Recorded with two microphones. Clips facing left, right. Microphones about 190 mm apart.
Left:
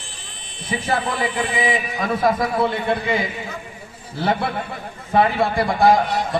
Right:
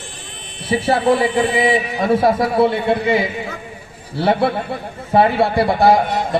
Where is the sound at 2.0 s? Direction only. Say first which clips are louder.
Right 4 dB; 30° right (ahead or behind).